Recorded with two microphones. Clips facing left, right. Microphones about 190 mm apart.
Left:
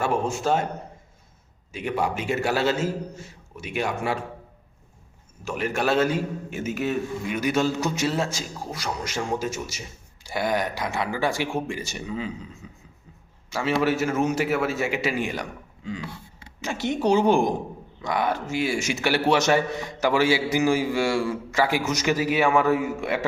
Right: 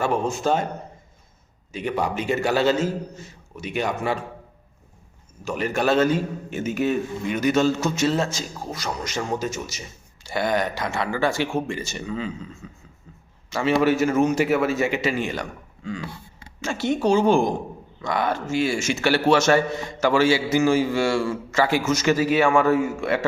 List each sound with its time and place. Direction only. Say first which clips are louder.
0.0 s a man's voice: right 2 dB; 5° left (ahead or behind)
1.7 s a man's voice: right 1 dB; 5° left (ahead or behind)
5.5 s a man's voice: right 2 dB; 5° left (ahead or behind)